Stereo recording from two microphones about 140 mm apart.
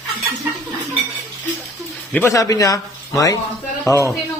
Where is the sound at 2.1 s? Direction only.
15° left (ahead or behind).